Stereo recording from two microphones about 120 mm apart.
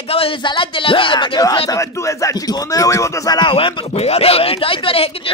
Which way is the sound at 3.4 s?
45° left (ahead or behind).